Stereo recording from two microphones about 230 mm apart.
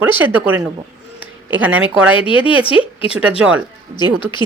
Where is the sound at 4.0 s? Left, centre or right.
Centre.